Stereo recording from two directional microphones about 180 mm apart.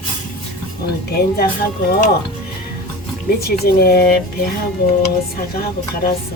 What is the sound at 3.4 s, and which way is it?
Speech, 60° left (ahead or behind).